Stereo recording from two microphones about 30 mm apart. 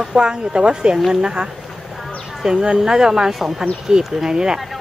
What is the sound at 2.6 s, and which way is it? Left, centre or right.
Speech, right.